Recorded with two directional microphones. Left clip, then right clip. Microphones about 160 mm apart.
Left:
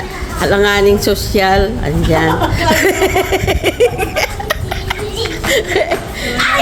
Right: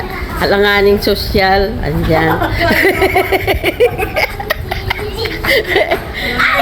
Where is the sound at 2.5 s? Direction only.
5° right (ahead or behind).